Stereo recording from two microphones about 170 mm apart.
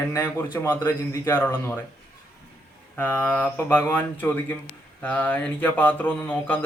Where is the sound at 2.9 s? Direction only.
10° left (ahead or behind).